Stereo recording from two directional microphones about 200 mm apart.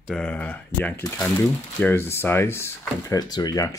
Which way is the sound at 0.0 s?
5° left (ahead or behind).